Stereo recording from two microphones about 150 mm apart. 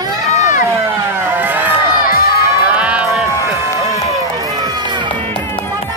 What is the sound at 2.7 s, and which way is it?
Music, 10° right (ahead or behind).